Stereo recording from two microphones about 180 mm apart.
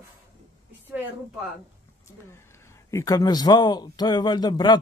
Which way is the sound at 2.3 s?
15° left (ahead or behind).